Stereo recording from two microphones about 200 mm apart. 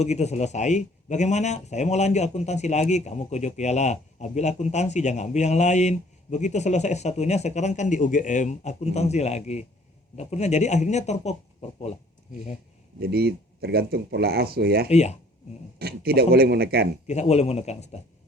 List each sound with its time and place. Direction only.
0.0 s speech: 35° left (ahead or behind)
13.0 s speech: 55° right (ahead or behind)
14.8 s speech: 35° left (ahead or behind)
15.8 s speech: 50° right (ahead or behind)
17.1 s speech: 35° left (ahead or behind)